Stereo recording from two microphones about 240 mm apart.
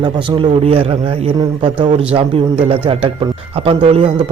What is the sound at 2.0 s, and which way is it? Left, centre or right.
Speech, centre.